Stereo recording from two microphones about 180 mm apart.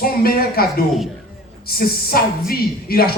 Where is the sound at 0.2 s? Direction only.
55° left (ahead or behind).